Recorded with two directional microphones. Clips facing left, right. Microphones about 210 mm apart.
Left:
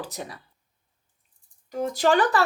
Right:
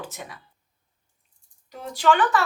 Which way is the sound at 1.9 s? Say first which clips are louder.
Right 1 dB; 40° left (ahead or behind).